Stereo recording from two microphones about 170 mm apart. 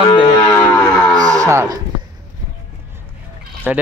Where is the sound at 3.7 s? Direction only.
10° right (ahead or behind).